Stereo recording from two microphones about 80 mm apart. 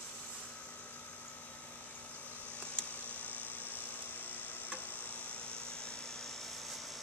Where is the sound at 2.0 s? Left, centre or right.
Centre.